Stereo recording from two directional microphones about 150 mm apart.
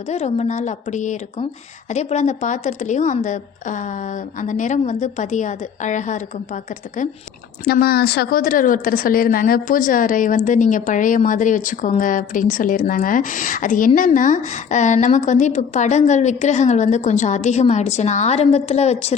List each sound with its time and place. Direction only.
0.1 s a woman's voice: 45° left (ahead or behind)
7.7 s a woman's voice: 90° left; by 19.1 s 45° left (ahead or behind)